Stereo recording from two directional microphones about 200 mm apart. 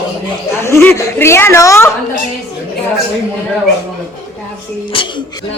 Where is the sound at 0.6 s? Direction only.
10° left (ahead or behind).